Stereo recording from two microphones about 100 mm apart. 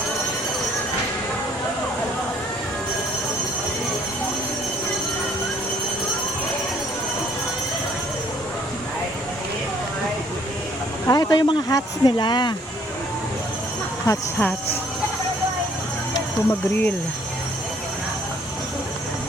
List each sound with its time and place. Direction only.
11.0 s a sound: 40° left (ahead or behind)
11.7 s speech: 45° left (ahead or behind)
14.3 s speech: 20° left (ahead or behind)
16.5 s speech: 15° left (ahead or behind)